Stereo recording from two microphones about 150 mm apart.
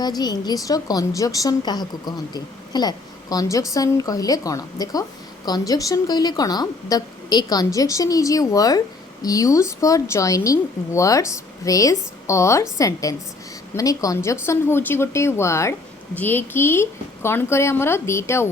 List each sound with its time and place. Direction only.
0.0 s a woman's voice: 25° left (ahead or behind)